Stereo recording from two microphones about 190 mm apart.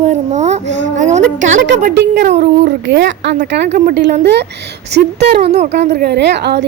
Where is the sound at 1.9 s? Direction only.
60° right (ahead or behind).